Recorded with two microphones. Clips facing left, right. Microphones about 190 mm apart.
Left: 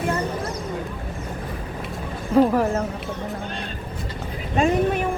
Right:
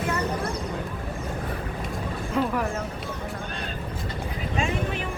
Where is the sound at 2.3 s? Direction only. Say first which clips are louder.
Left 9 dB; 40° left (ahead or behind).